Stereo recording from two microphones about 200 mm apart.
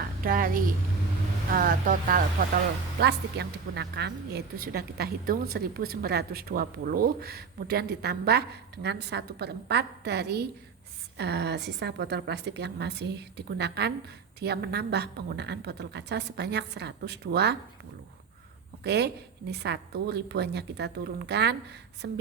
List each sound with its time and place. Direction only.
0.2 s a woman's voice: 45° right (ahead or behind)
3.0 s a woman's voice: 55° right (ahead or behind)
18.8 s a woman's voice: 55° right (ahead or behind)